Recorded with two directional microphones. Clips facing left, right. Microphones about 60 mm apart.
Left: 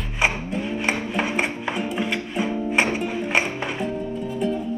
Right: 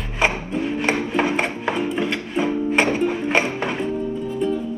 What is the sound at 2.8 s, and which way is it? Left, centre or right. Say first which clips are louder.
Music: right 2 dB; centre.